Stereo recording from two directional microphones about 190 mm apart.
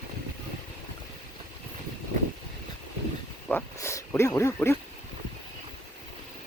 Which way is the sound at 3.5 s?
10° left (ahead or behind).